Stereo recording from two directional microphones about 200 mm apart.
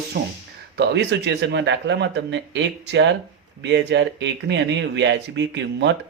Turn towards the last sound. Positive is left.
turn(degrees=-60)  # may be behind; listen again after turning